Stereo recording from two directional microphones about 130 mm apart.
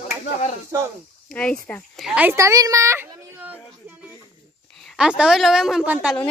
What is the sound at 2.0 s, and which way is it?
Speech, 10° right (ahead or behind).